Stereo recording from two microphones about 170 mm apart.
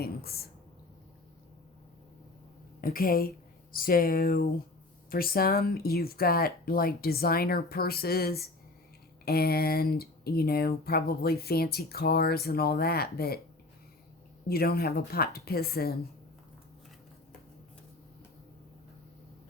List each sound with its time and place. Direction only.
0.0 s speech: 65° left (ahead or behind)
2.8 s speech: 60° left (ahead or behind)
14.4 s speech: 65° left (ahead or behind)